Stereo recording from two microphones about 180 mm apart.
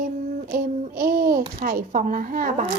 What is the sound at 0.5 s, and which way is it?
Speech, 50° right (ahead or behind).